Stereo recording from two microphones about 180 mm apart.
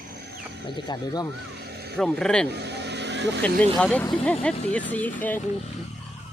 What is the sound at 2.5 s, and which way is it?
Vehicle, 65° right (ahead or behind).